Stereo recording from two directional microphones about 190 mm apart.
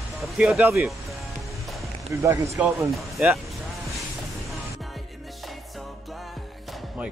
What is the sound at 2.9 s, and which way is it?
Speech, 5° right (ahead or behind).